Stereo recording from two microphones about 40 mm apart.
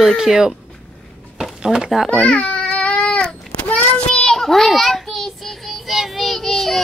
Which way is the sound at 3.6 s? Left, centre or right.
Left.